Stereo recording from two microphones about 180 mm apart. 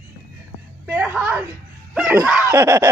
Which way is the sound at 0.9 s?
5° right (ahead or behind).